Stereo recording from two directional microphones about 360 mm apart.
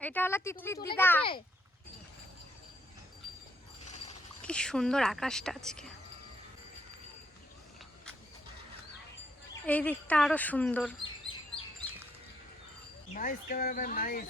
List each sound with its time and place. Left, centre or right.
0.0 s speech: centre
4.4 s speech: centre
9.6 s speech: centre
11.6 s chirp: centre
13.1 s speech: left